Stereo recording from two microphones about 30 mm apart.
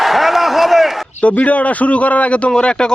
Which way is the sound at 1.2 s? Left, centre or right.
Left.